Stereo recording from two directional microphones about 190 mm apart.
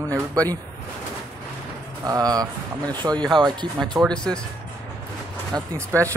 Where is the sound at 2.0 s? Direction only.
20° right (ahead or behind).